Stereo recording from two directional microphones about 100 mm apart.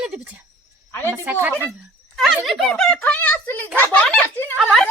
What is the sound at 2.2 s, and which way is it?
Speech, centre (ahead or behind).